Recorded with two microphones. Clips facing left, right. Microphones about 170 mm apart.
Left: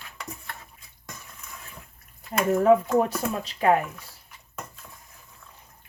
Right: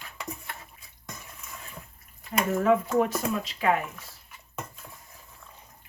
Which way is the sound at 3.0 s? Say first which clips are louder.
Even; 35° left (ahead or behind).